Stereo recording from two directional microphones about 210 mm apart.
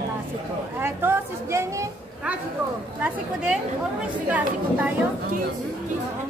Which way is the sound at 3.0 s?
5° right (ahead or behind).